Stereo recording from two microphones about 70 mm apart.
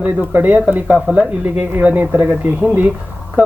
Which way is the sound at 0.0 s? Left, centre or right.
Right.